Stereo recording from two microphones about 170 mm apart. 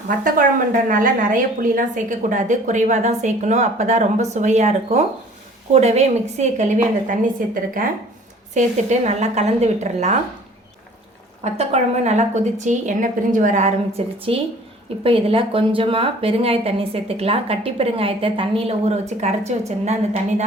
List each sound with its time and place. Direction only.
0.9 s a woman's voice: 55° right (ahead or behind)
11.4 s a woman's voice: 40° right (ahead or behind)